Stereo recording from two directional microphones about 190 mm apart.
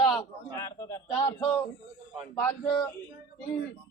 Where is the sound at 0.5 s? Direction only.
15° left (ahead or behind).